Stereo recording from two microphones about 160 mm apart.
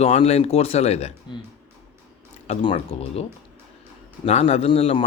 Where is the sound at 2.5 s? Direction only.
35° left (ahead or behind).